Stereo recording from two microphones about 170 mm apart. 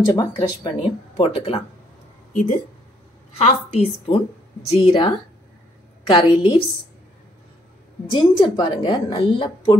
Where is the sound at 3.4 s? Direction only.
35° left (ahead or behind).